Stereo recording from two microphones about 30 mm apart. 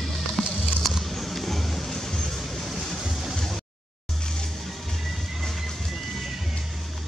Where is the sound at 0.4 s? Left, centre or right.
Left.